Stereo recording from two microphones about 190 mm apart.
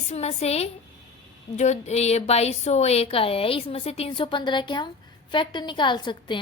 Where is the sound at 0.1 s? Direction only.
35° left (ahead or behind).